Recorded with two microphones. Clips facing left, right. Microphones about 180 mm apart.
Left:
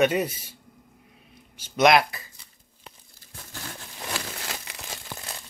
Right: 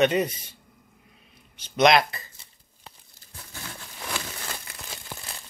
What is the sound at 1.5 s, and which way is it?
Speech, 10° left (ahead or behind).